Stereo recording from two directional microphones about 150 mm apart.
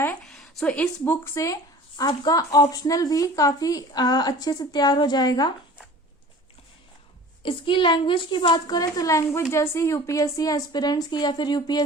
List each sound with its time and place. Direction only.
0.3 s speech: 5° left (ahead or behind); by 5.5 s 25° left (ahead or behind)
7.4 s a woman's voice: 35° left (ahead or behind)